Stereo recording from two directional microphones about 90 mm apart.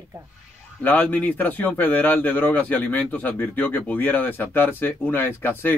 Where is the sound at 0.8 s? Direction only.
20° left (ahead or behind).